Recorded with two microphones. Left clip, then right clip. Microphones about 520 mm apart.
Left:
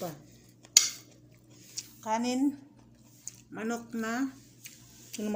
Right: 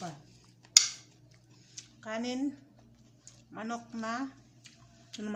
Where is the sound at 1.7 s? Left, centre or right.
Right.